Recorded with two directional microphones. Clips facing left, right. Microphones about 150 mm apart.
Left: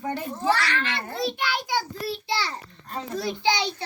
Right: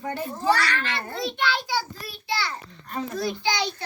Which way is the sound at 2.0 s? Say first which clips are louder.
Left 2 dB; 30° left (ahead or behind).